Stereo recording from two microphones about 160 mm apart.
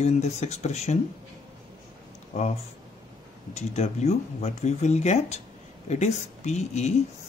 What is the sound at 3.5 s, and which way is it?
Speech, 45° left (ahead or behind).